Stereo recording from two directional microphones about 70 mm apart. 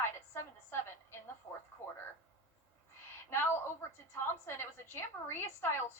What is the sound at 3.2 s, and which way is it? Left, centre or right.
A woman's voice, left.